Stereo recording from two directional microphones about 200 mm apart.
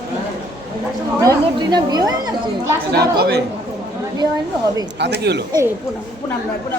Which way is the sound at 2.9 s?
55° right (ahead or behind).